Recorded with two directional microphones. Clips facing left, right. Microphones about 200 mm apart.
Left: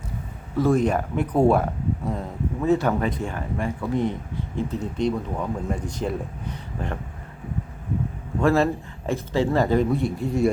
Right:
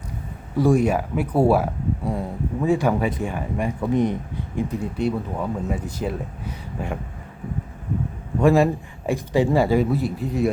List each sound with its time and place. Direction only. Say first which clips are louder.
0.5 s speech: right 2 dB; 10° right (ahead or behind)
8.4 s speech: right 3 dB; 15° right (ahead or behind)